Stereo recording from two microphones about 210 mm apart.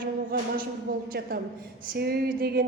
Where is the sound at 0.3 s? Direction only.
45° right (ahead or behind).